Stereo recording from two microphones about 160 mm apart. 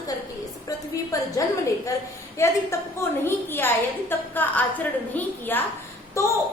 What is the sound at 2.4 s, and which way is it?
A woman's voice, 15° left (ahead or behind).